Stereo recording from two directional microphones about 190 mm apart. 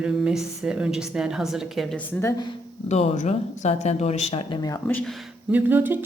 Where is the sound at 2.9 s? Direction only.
35° left (ahead or behind).